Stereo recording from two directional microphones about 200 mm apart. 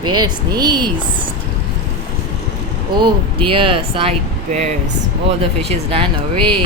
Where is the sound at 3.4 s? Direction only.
25° right (ahead or behind).